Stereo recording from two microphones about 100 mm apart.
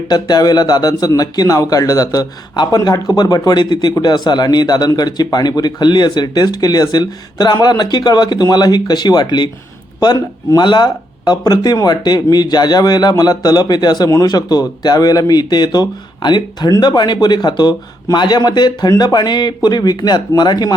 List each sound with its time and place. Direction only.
0.1 s a man's voice: 40° left (ahead or behind)